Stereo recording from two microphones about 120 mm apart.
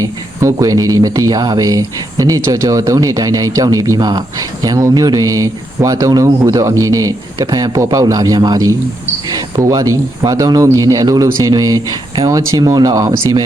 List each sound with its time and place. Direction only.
0.4 s speech: 30° right (ahead or behind)